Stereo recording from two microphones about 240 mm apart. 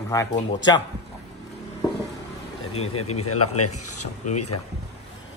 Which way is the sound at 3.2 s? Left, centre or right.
Left.